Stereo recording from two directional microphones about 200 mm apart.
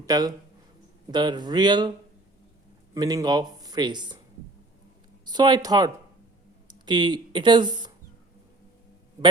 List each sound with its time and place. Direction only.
0.0 s speech: 20° right (ahead or behind)
2.9 s speech: 15° right (ahead or behind)
5.2 s speech: 20° right (ahead or behind)